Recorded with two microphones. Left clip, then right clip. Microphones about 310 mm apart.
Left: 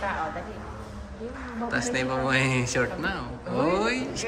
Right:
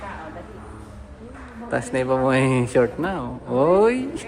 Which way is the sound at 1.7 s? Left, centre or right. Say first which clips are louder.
Right 6 dB; centre.